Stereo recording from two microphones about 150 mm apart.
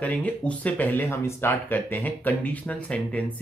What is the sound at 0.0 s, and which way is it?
Speech, 10° left (ahead or behind).